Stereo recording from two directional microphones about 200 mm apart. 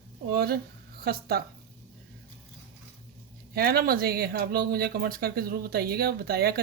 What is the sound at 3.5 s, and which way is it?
Speech, 50° right (ahead or behind).